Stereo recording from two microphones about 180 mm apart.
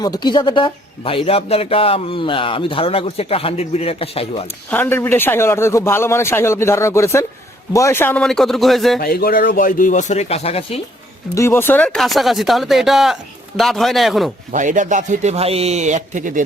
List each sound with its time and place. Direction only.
0.0 s a man's voice: 25° left (ahead or behind)
4.7 s a man's voice: 10° left (ahead or behind)
9.0 s speech: 60° left (ahead or behind); by 10.8 s 35° left (ahead or behind)
11.3 s speech: 15° left (ahead or behind)
14.5 s a man's voice: 45° right (ahead or behind)